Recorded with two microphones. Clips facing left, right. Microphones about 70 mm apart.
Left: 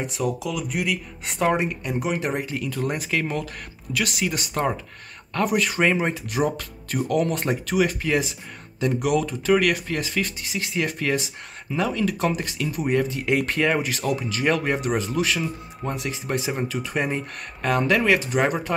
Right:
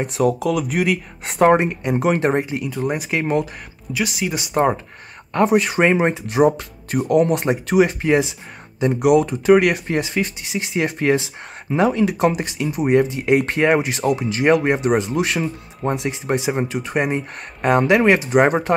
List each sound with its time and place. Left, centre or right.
0.0 s speech: right
1.4 s speech: right
1.7 s speech: right
2.0 s speech: right
2.6 s speech: centre
3.1 s speech: right
3.9 s speech: centre
5.3 s speech: right
7.3 s speech: right
9.0 s speech: right
13.5 s speech: right